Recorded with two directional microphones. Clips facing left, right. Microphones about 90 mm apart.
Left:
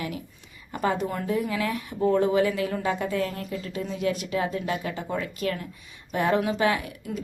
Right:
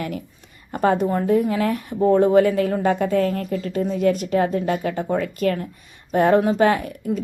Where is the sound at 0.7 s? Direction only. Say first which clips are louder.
Right 7 dB; 50° right (ahead or behind).